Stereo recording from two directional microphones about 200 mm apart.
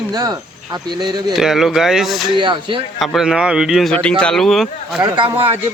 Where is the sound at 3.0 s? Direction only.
Centre (ahead or behind).